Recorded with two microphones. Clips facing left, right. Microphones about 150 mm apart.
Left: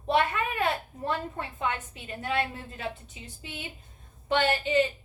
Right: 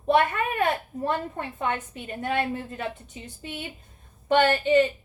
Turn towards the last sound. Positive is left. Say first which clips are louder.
# right 5 dB
turn(degrees=-45)  # may be behind; listen again after turning